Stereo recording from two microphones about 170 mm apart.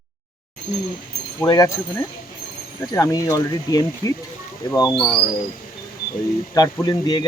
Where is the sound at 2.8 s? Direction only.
20° left (ahead or behind).